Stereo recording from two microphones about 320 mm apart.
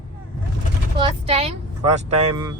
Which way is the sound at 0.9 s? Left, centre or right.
Centre.